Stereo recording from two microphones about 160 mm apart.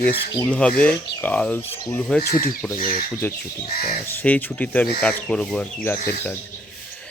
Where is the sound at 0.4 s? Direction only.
5° left (ahead or behind).